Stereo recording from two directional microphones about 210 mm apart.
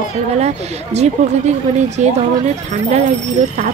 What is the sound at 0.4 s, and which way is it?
Speech, 30° right (ahead or behind).